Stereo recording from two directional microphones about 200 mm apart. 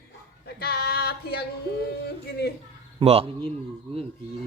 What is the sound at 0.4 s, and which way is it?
Speech, 55° left (ahead or behind).